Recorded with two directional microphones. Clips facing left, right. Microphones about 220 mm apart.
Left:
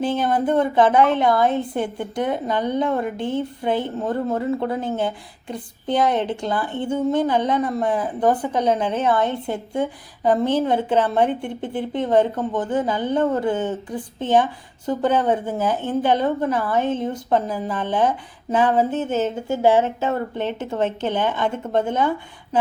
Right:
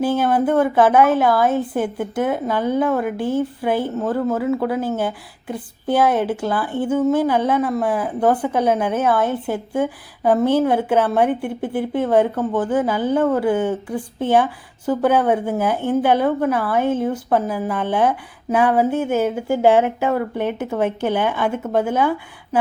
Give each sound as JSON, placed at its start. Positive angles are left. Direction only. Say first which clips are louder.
{"t": 0.0, "sound": "speech", "louder": "right 3 dB", "side_deg": -5}
{"t": 3.9, "sound": "speech", "louder": "right 3 dB", "side_deg": 20}
{"t": 4.4, "sound": "speech", "louder": "right 3 dB", "side_deg": -5}